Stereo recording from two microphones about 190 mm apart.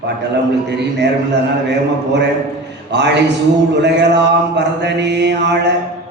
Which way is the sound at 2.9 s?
65° right (ahead or behind).